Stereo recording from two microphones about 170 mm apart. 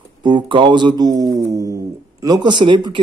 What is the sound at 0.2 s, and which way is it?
Speech, 30° right (ahead or behind).